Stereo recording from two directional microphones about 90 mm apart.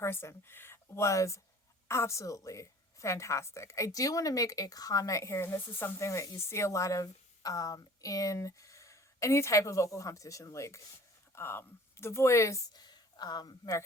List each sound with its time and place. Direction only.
0.0 s a woman's voice: 30° left (ahead or behind)
12.7 s speech: 50° left (ahead or behind)